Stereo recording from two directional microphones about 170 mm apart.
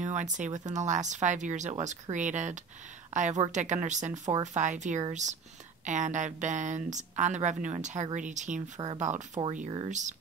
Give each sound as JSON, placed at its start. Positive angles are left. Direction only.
{"t": 0.0, "sound": "speech", "side_deg": -45}